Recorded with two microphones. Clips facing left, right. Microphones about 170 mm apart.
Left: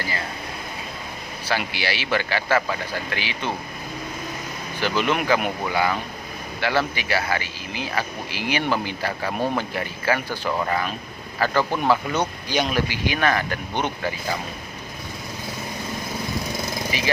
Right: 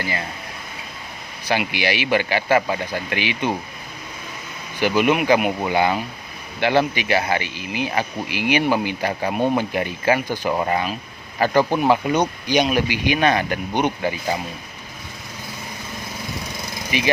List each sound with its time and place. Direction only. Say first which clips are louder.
1.5 s speech: right 4 dB; 15° right (ahead or behind)
4.8 s speech: right 5 dB; 10° right (ahead or behind)
5.6 s speech: right 3 dB; 25° right (ahead or behind)
16.9 s speech: right 9 dB; 20° right (ahead or behind)